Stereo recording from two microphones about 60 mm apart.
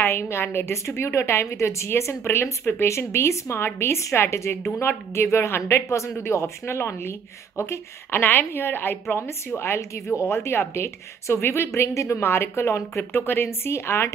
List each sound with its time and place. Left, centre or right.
0.0 s speech: left
8.2 s a woman's voice: left
12.2 s speech: left